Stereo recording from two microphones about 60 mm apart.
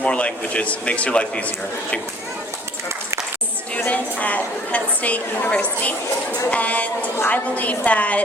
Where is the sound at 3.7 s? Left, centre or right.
Left.